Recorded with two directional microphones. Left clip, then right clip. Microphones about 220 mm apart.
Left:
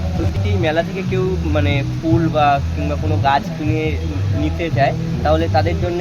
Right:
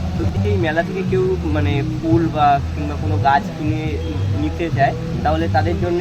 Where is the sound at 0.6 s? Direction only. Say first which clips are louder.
Left 3 dB; 40° left (ahead or behind).